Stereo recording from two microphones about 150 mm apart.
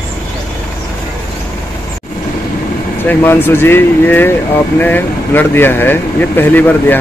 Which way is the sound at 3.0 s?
15° left (ahead or behind).